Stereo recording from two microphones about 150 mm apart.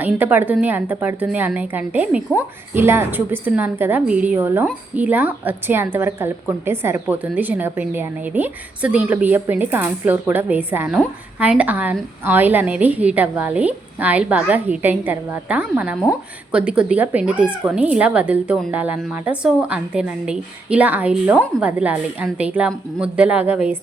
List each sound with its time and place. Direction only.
0.0 s a woman's voice: 10° right (ahead or behind)